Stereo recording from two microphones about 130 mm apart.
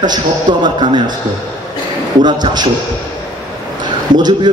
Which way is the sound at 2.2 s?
35° right (ahead or behind).